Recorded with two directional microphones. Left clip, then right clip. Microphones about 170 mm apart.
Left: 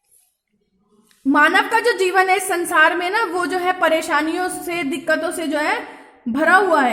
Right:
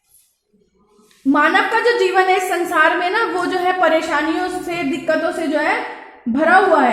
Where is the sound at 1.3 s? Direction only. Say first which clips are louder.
Even; 30° left (ahead or behind).